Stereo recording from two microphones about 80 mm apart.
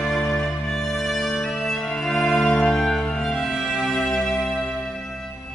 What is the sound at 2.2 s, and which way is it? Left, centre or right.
Music, centre.